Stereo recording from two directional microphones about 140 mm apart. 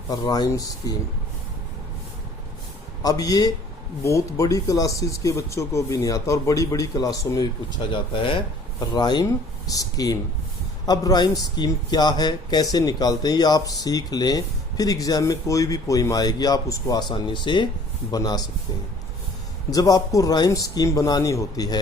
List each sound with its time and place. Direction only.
0.1 s speech: 30° left (ahead or behind)
3.0 s speech: 25° left (ahead or behind)
19.7 s speech: 25° left (ahead or behind)